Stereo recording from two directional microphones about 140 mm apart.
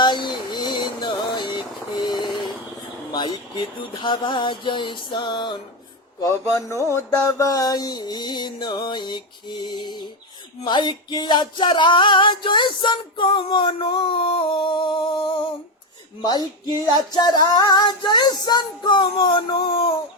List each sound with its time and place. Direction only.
0.0 s vehicle: 35° left (ahead or behind)
3.1 s music: 30° left (ahead or behind)
6.2 s speech: 20° left (ahead or behind)
6.9 s music: 25° left (ahead or behind)
16.8 s music: 30° left (ahead or behind)